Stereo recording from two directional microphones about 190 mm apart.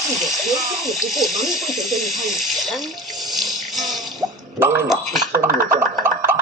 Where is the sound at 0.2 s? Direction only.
Centre (ahead or behind).